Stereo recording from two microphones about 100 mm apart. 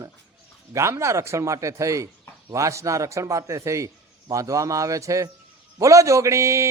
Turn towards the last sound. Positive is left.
turn(degrees=-30)  # may be behind; listen again after turning